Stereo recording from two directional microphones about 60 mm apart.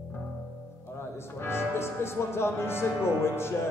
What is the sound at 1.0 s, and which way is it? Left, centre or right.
A man's voice, left.